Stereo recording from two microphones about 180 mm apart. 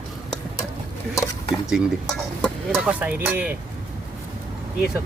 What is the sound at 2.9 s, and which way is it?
Speech, 10° right (ahead or behind).